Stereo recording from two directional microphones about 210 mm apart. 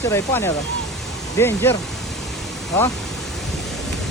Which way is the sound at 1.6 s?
15° left (ahead or behind).